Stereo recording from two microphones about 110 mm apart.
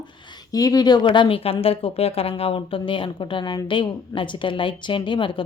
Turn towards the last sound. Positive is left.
turn(degrees=50)  # may be behind; listen again after turning